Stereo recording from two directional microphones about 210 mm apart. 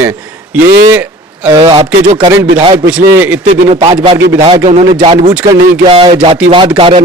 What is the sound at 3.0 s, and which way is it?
Speech, 10° right (ahead or behind).